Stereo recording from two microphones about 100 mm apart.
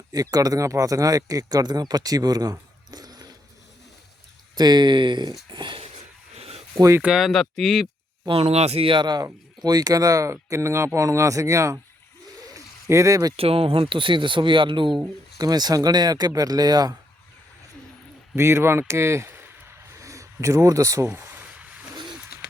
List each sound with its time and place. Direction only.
0.1 s speech: 40° right (ahead or behind)
4.5 s speech: 45° right (ahead or behind)
5.5 s a sound: 50° right (ahead or behind)
6.3 s a sound: 90° right
7.0 s speech: 5° right (ahead or behind)
8.3 s speech: 90° right
8.9 s speech: 50° right (ahead or behind); by 11.8 s 30° right (ahead or behind)
12.5 s a sound: 30° right (ahead or behind)
13.3 s speech: 70° right (ahead or behind)
13.9 s speech: 55° right (ahead or behind)
15.4 s speech: 40° right (ahead or behind)
18.3 s speech: 25° right (ahead or behind)
21.1 s a sound: 20° right (ahead or behind)